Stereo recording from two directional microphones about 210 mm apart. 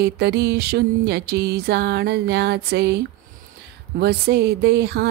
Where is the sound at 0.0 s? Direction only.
50° right (ahead or behind).